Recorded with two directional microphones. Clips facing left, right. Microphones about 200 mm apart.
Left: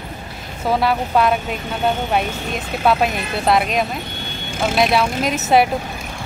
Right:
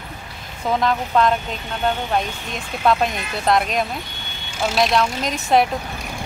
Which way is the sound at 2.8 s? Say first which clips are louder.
Left 1 dB; 5° left (ahead or behind).